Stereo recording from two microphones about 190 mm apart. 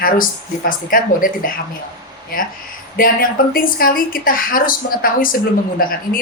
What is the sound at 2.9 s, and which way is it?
A woman's voice, 50° left (ahead or behind).